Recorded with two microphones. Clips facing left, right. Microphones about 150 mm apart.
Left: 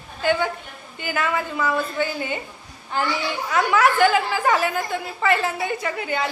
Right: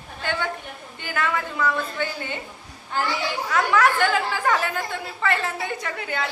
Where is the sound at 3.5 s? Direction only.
10° left (ahead or behind).